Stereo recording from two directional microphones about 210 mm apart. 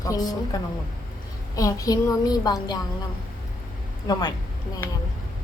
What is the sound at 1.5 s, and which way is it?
A woman's voice, 15° left (ahead or behind).